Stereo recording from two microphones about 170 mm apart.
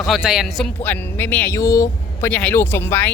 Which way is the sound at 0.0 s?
Centre (ahead or behind).